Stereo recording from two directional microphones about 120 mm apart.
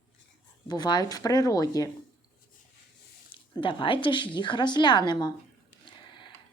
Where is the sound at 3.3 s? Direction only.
45° left (ahead or behind).